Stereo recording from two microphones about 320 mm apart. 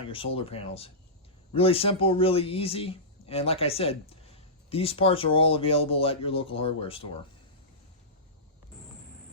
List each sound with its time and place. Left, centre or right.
0.1 s a man's voice: centre